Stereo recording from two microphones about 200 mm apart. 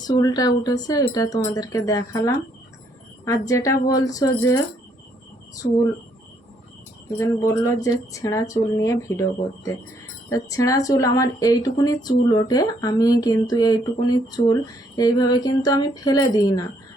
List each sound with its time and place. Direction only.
0.0 s speech: 20° left (ahead or behind)
5.6 s speech: 50° left (ahead or behind)
7.2 s speech: 15° left (ahead or behind)
10.2 s speech: 15° left (ahead or behind)